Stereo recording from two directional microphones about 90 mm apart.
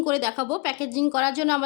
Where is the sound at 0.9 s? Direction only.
25° right (ahead or behind).